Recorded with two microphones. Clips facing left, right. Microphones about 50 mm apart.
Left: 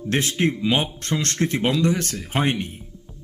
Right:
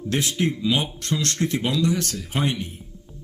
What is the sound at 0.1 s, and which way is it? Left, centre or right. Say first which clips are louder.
Speech: left 2 dB; left.